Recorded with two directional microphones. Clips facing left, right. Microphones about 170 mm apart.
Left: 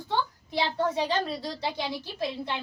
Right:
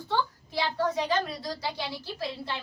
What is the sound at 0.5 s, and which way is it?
A woman's voice, 25° left (ahead or behind).